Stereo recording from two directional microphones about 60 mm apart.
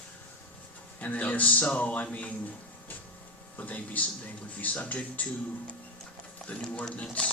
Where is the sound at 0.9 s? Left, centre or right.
Left.